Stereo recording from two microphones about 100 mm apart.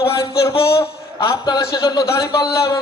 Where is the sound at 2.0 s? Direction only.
30° left (ahead or behind).